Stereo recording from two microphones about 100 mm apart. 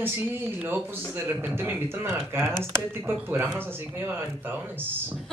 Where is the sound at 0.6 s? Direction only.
20° right (ahead or behind).